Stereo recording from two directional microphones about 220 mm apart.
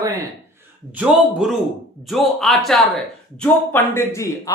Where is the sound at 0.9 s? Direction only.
5° right (ahead or behind).